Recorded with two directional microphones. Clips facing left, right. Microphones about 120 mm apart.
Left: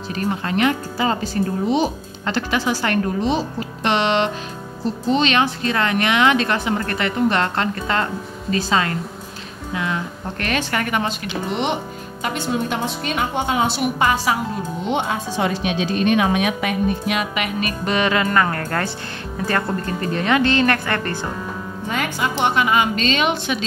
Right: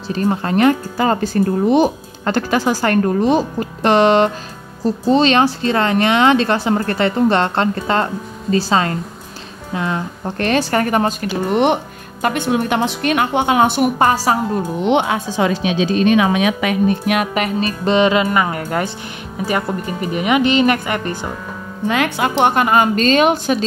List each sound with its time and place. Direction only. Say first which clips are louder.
0.1 s speech: right 5 dB; 35° right (ahead or behind)
14.8 s speech: right 6 dB; 75° right (ahead or behind)
16.6 s speech: right 4 dB; 65° right (ahead or behind); by 21.3 s 15° right (ahead or behind)
21.8 s speech: right 6 dB; 85° right; by 23.6 s 40° right (ahead or behind)